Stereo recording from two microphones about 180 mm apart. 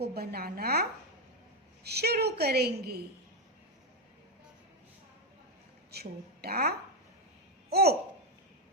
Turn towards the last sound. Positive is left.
turn(degrees=-60)  # may be behind; listen again after turning